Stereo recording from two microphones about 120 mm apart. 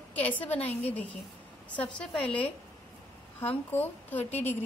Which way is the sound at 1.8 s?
10° left (ahead or behind).